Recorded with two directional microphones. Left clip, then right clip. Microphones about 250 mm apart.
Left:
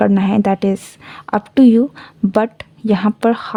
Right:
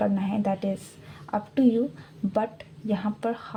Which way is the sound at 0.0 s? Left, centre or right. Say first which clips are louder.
Left 12 dB; left.